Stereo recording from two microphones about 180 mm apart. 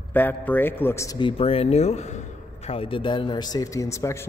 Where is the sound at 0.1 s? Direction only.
10° left (ahead or behind).